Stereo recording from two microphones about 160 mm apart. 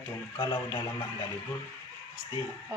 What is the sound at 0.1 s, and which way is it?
Speech, 25° left (ahead or behind).